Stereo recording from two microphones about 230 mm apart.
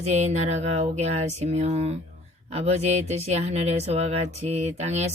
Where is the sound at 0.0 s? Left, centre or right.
Right.